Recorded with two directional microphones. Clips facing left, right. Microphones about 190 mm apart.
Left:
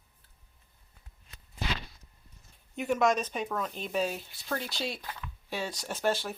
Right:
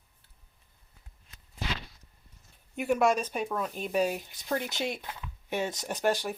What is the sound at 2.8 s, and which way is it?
Speech, 10° right (ahead or behind).